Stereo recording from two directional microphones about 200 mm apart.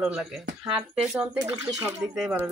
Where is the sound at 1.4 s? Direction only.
15° right (ahead or behind).